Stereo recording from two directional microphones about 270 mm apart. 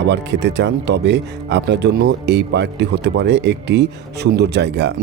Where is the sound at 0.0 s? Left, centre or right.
Right.